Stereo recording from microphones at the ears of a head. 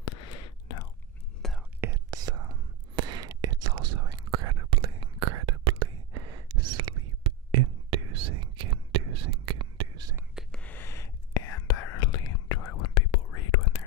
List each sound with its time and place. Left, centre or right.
0.0 s whispering: left
1.8 s whispering: right
10.6 s whispering: left